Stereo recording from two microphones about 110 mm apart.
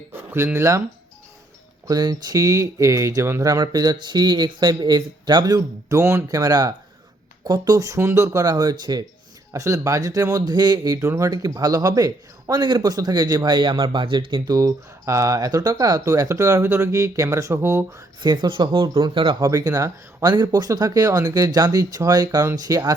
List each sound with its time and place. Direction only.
0.1 s speech: 20° right (ahead or behind)
1.9 s speech: 35° right (ahead or behind)
9.5 s speech: 30° right (ahead or behind)
18.2 s speech: 45° right (ahead or behind)
19.4 s speech: 30° right (ahead or behind)